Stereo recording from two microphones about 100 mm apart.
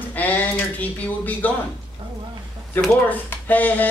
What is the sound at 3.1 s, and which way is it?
Speech, 15° left (ahead or behind).